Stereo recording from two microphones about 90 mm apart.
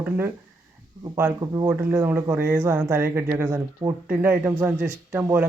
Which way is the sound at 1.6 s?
25° right (ahead or behind).